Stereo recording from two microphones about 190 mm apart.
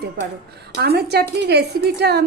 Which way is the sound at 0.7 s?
60° right (ahead or behind).